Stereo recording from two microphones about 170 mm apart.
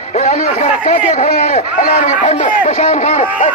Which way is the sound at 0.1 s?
45° left (ahead or behind).